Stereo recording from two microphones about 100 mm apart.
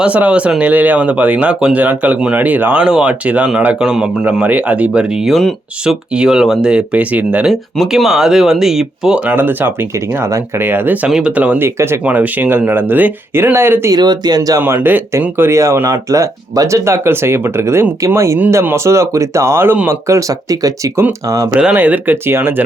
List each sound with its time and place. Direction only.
0.0 s speech: 10° right (ahead or behind)
5.2 s speech: 5° left (ahead or behind); by 7.5 s 15° right (ahead or behind)
7.5 s speech: centre (ahead or behind); by 13.9 s 25° right (ahead or behind)
13.9 s speech: 45° right (ahead or behind)
14.6 s speech: 20° right (ahead or behind)
20.1 s speech: 35° right (ahead or behind)
21.5 s speech: 10° right (ahead or behind)